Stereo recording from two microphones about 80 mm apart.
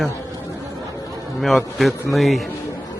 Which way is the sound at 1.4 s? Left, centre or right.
Centre.